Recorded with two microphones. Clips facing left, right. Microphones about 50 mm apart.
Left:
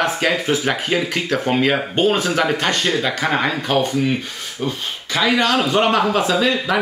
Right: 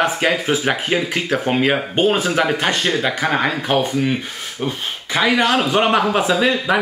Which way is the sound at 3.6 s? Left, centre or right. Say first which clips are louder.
Even; centre.